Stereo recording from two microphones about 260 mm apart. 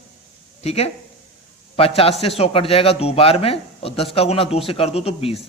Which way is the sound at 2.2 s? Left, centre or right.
Left.